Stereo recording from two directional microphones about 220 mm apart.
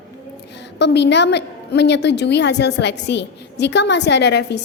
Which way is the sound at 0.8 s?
50° left (ahead or behind).